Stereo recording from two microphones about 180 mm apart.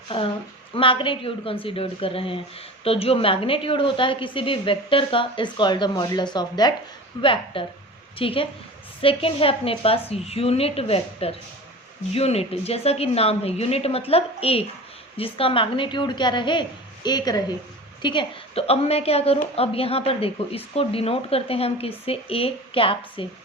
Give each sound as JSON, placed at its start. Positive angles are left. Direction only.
{"t": 0.1, "sound": "a woman's voice", "side_deg": 30}